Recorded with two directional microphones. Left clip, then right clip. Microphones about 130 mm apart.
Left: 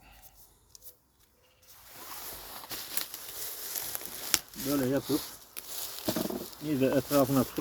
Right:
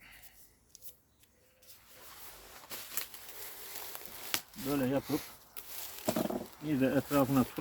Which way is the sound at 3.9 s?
90° left.